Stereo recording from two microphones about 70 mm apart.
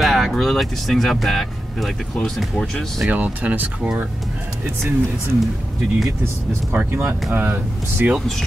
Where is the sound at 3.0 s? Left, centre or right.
Centre.